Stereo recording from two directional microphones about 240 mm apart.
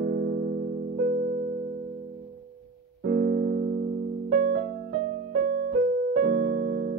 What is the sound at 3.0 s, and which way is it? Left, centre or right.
Piano, right.